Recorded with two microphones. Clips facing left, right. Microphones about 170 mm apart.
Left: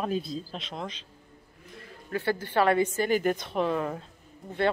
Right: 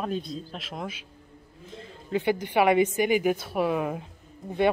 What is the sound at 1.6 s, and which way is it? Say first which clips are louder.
A woman's voice: right 4 dB; 25° right (ahead or behind).